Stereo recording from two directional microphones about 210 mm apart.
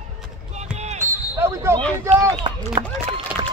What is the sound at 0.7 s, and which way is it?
Basketball bounce, 30° right (ahead or behind).